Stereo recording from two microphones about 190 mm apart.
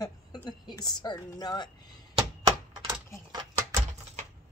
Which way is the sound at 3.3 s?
20° right (ahead or behind).